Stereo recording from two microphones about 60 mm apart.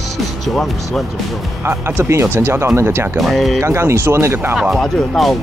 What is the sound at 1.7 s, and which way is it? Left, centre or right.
Speech, right.